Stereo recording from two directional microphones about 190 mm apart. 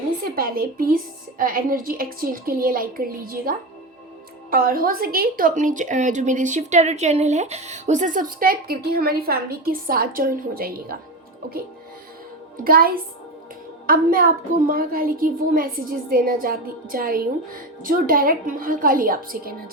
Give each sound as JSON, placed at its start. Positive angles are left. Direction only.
{"t": 0.3, "sound": "a woman's voice", "side_deg": -50}
{"t": 4.5, "sound": "a woman's voice", "side_deg": -50}
{"t": 12.6, "sound": "a woman's voice", "side_deg": -50}